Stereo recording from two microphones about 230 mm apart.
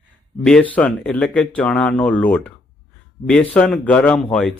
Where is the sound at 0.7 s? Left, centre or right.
Centre.